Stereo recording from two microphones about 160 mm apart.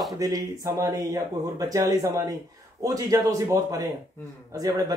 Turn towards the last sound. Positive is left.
turn(degrees=-20)  # may be behind; listen again after turning